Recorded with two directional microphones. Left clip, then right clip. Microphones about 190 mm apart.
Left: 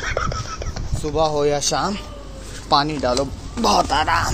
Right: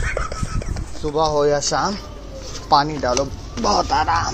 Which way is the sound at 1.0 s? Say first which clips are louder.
Even; centre (ahead or behind).